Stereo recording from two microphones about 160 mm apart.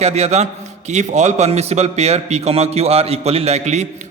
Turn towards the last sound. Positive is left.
turn(degrees=-45)  # may be behind; listen again after turning